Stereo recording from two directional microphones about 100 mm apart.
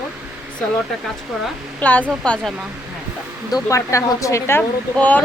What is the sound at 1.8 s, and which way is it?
Speech, 15° left (ahead or behind).